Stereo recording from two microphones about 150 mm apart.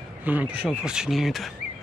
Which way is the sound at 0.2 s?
10° right (ahead or behind).